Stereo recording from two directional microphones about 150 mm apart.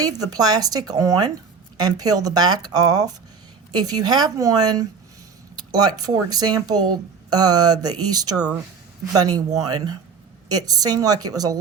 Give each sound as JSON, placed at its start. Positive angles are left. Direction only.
{"t": 0.0, "sound": "speech", "side_deg": -25}
{"t": 5.5, "sound": "a sound", "side_deg": -25}
{"t": 6.0, "sound": "speech", "side_deg": -25}